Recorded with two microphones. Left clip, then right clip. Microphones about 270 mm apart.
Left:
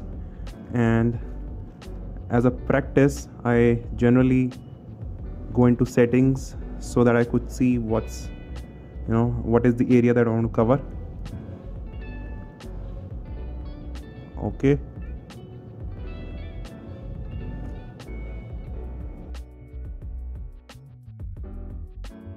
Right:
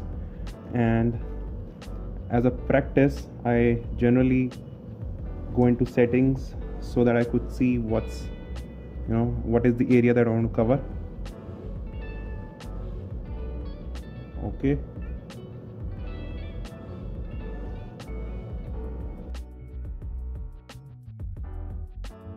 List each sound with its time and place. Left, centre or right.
0.7 s speech: centre
2.2 s speech: centre
5.6 s speech: centre
9.1 s speech: centre